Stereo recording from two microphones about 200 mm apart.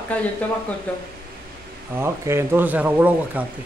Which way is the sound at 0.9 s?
5° left (ahead or behind).